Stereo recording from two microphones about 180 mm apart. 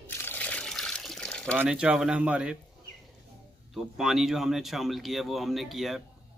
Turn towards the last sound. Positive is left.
turn(degrees=0)  # may be behind; listen again after turning